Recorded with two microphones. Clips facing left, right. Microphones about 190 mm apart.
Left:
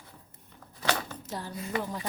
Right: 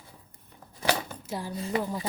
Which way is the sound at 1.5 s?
30° right (ahead or behind).